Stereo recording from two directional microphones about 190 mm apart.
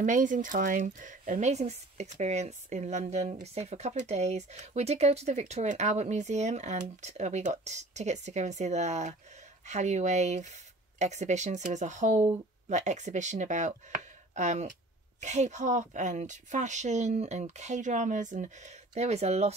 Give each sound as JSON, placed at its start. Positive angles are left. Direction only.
{"t": 0.0, "sound": "speech", "side_deg": -40}